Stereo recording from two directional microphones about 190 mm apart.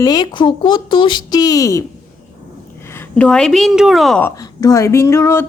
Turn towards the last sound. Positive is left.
turn(degrees=15)  # may be behind; listen again after turning